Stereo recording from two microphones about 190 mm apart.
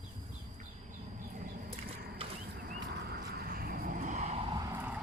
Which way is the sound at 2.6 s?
55° right (ahead or behind).